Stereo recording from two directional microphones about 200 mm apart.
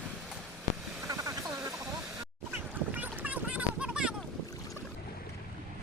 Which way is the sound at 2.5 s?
10° right (ahead or behind).